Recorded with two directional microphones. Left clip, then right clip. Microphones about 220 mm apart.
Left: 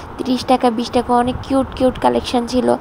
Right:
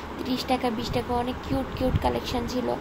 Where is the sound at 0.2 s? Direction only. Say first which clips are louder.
Left 11 dB; 30° left (ahead or behind).